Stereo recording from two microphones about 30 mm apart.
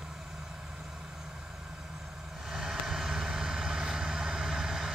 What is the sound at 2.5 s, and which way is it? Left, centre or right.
Vehicle, centre.